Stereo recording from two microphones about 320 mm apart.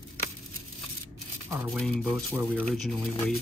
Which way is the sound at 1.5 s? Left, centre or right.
Centre.